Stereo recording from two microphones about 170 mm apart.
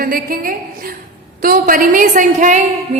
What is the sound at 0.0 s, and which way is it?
A woman's voice, 60° right (ahead or behind).